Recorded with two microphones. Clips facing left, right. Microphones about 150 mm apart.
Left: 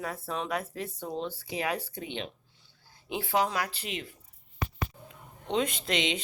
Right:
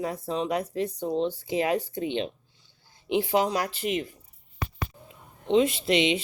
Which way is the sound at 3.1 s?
20° right (ahead or behind).